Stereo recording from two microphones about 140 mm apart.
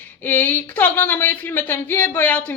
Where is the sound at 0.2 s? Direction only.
15° left (ahead or behind).